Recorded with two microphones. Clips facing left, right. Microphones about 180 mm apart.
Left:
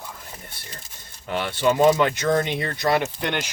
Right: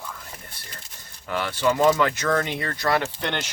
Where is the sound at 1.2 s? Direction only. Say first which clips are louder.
Left 1 dB; 25° left (ahead or behind).